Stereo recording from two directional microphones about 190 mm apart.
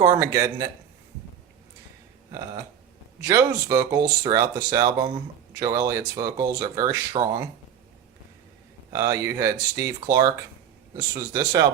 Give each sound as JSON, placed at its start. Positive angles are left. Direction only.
{"t": 0.0, "sound": "speech", "side_deg": -15}
{"t": 3.2, "sound": "speech", "side_deg": -15}
{"t": 8.9, "sound": "speech", "side_deg": -15}